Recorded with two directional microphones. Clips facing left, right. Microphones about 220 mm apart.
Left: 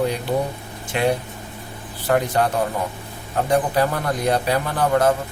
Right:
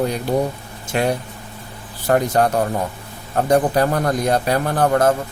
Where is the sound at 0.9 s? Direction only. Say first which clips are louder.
Right 1 dB; 45° right (ahead or behind).